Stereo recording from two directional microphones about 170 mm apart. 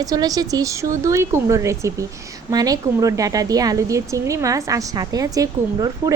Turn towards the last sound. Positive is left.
turn(degrees=-20)  # may be behind; listen again after turning